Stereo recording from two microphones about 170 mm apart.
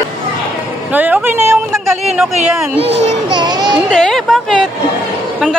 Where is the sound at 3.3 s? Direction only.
25° right (ahead or behind).